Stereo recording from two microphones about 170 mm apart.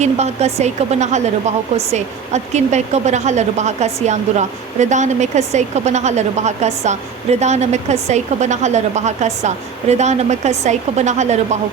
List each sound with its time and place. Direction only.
0.0 s speech: 40° right (ahead or behind)